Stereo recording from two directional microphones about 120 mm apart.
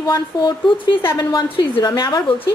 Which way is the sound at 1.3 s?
35° left (ahead or behind).